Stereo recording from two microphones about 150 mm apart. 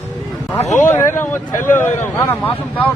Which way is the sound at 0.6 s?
55° left (ahead or behind).